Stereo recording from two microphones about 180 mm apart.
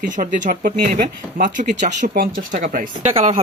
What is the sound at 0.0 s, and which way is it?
Speech, 45° right (ahead or behind).